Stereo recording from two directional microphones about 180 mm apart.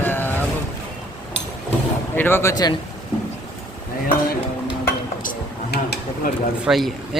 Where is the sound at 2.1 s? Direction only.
10° left (ahead or behind).